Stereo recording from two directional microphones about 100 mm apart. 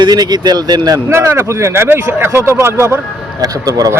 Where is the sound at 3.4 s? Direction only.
35° right (ahead or behind).